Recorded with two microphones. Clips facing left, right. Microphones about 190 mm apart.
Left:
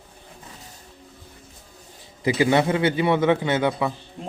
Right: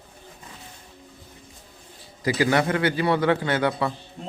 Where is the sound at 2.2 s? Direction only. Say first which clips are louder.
Left 2 dB; 20° left (ahead or behind).